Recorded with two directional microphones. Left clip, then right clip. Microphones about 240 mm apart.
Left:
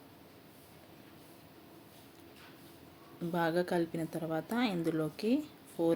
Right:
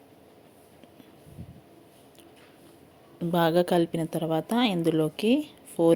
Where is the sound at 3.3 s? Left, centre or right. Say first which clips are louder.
Right 9 dB; right.